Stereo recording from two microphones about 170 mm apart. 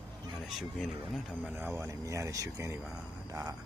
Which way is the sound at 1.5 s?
10° right (ahead or behind).